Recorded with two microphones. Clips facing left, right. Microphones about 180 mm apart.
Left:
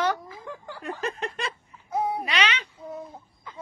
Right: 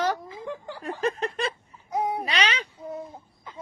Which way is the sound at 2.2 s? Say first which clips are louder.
Even; 35° right (ahead or behind).